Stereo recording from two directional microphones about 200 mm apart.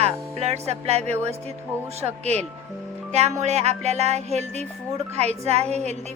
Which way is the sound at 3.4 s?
35° right (ahead or behind).